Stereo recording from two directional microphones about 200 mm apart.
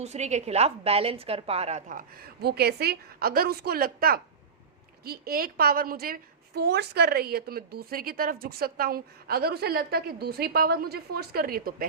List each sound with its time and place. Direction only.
0.0 s a woman's voice: 35° right (ahead or behind)